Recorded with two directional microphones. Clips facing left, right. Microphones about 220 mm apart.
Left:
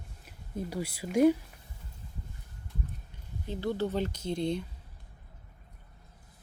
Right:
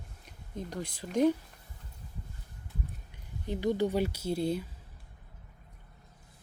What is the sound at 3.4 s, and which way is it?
Speech, 15° right (ahead or behind).